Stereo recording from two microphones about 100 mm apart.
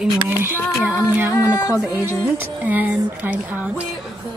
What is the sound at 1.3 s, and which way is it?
Speech, 35° left (ahead or behind).